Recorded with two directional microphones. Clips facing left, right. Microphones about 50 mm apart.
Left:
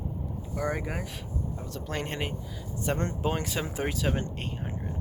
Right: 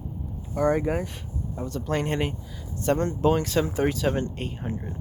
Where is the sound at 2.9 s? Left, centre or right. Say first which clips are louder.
Right 6 dB; left.